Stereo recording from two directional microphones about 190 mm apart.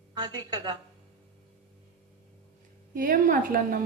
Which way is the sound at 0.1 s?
20° right (ahead or behind).